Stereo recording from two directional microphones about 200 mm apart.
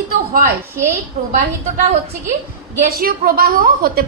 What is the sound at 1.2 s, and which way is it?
Speech, 45° right (ahead or behind).